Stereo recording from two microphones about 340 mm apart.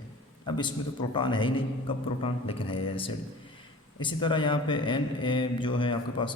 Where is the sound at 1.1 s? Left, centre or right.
Centre.